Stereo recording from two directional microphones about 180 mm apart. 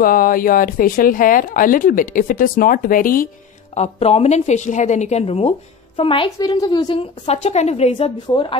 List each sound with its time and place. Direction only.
0.0 s speech: 55° left (ahead or behind)
3.7 s a woman's voice: 35° left (ahead or behind)